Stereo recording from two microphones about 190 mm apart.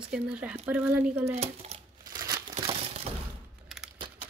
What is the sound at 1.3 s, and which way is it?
Speech, 35° right (ahead or behind).